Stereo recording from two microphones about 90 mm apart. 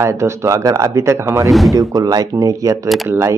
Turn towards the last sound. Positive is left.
turn(degrees=-35)  # may be behind; listen again after turning